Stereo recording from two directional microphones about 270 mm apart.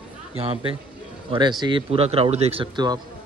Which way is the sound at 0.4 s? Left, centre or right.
Right.